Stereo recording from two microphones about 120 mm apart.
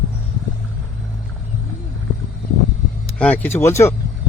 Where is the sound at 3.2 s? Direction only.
15° left (ahead or behind).